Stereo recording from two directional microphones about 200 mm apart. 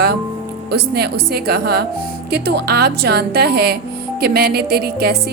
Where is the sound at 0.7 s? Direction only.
55° right (ahead or behind).